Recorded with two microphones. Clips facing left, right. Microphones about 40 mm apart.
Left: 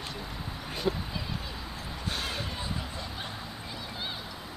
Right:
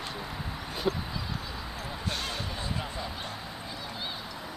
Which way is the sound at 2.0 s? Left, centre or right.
Centre.